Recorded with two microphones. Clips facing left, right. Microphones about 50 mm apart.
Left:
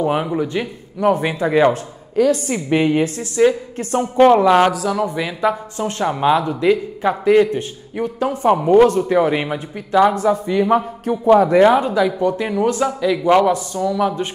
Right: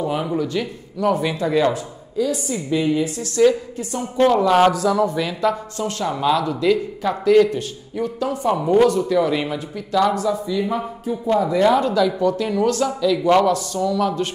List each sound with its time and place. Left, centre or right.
0.2 s speech: left
1.7 s a woman's voice: left
3.2 s speech: left
4.0 s a woman's voice: left
10.2 s a woman's voice: left
11.8 s speech: left